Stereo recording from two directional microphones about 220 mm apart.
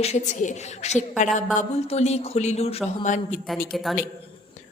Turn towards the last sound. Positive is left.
turn(degrees=0)  # may be behind; listen again after turning